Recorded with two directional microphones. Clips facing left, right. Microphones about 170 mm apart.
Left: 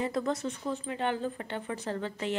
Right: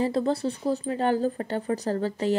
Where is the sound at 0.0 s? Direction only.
30° right (ahead or behind).